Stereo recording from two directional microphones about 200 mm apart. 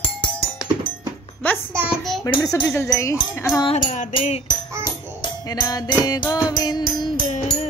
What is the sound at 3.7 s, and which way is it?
Music, 30° left (ahead or behind).